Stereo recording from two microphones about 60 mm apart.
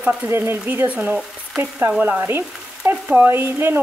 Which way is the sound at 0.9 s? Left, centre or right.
Right.